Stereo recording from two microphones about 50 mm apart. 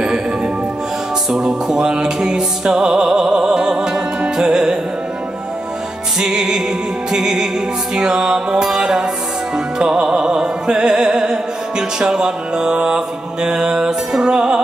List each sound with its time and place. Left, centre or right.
1.3 s music: centre
6.1 s mantra: centre
9.8 s music: centre
12.0 s mantra: centre